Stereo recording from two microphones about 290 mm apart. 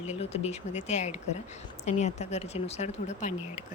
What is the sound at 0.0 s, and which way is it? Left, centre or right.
Speech, left.